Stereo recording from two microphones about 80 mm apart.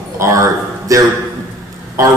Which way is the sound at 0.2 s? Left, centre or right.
Right.